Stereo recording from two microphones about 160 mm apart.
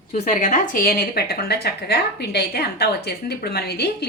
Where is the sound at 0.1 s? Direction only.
50° left (ahead or behind).